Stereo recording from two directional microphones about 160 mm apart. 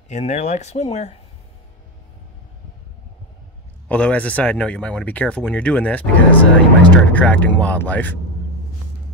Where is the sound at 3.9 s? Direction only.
10° left (ahead or behind).